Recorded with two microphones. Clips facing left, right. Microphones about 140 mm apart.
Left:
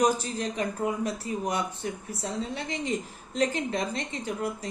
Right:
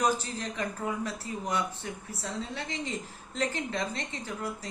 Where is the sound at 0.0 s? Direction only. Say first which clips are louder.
Left 4 dB; 15° left (ahead or behind).